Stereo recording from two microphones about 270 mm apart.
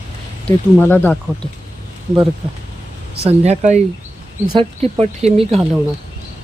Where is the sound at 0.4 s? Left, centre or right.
Centre.